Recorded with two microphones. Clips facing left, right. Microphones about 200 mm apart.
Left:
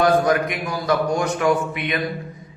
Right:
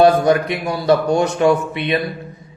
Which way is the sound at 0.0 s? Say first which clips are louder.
Right 5 dB; 30° right (ahead or behind).